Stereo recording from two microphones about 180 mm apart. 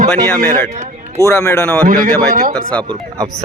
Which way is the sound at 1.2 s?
15° left (ahead or behind).